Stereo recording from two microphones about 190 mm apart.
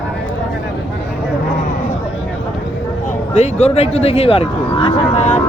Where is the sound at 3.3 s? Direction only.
35° left (ahead or behind).